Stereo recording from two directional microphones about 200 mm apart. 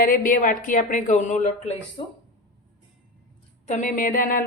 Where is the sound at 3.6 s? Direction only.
40° left (ahead or behind).